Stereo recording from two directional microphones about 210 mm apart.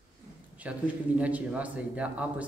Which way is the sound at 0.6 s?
5° right (ahead or behind).